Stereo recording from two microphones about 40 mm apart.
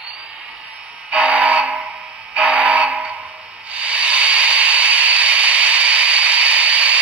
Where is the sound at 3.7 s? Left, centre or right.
Right.